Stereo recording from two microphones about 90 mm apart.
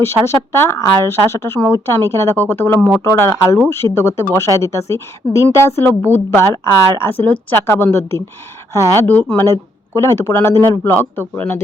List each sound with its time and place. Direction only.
0.0 s a woman's voice: 30° left (ahead or behind)
3.0 s a woman's voice: 30° left (ahead or behind)
9.5 s speech: 35° left (ahead or behind)
10.9 s a woman's voice: 20° left (ahead or behind)